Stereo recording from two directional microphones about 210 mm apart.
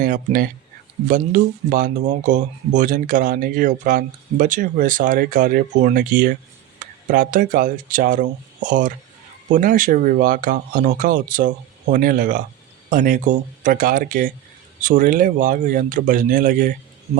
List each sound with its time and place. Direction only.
0.0 s speech: 40° right (ahead or behind)